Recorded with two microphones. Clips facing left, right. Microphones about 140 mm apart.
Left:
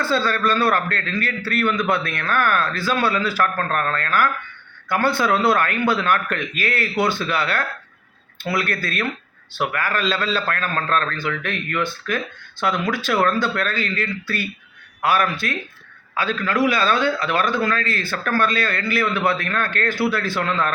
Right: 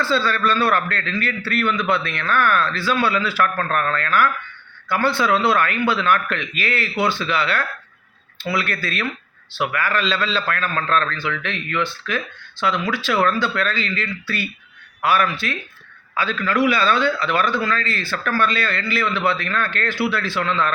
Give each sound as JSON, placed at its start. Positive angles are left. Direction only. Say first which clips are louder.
{"t": 0.0, "sound": "a man's voice", "louder": "even", "side_deg": 45}